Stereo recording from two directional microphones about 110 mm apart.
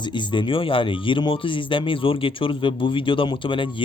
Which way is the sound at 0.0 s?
45° left (ahead or behind).